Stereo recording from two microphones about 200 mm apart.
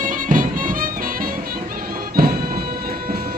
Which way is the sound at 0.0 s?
40° right (ahead or behind).